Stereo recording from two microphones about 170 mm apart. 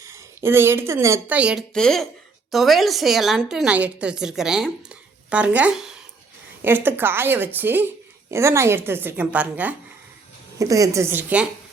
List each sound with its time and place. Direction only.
0.0 s a woman's voice: 15° right (ahead or behind)
10.6 s a woman's voice: 20° right (ahead or behind)